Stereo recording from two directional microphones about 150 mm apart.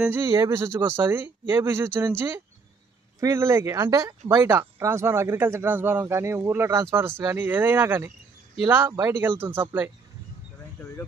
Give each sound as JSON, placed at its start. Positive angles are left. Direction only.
{"t": 0.0, "sound": "speech", "side_deg": -15}